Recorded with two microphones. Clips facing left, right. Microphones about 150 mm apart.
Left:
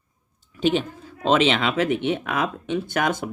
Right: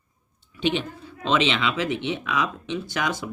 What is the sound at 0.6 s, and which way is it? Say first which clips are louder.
Speech: left 3 dB; 45° left (ahead or behind).